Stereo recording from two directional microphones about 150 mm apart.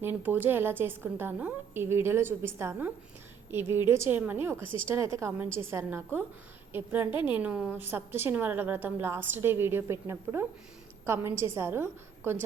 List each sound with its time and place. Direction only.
0.0 s a woman's voice: 10° right (ahead or behind)
7.1 s a woman's voice: 35° left (ahead or behind)
7.3 s a woman's voice: 10° right (ahead or behind)